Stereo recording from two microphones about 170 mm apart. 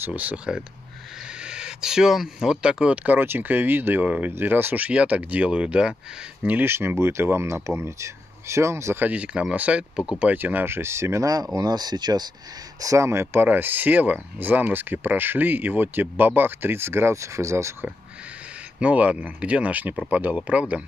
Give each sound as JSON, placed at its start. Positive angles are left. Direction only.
{"t": 0.0, "sound": "speech", "side_deg": -10}
{"t": 18.8, "sound": "speech", "side_deg": -10}